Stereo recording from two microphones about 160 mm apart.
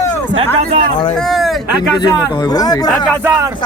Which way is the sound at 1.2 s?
Centre (ahead or behind).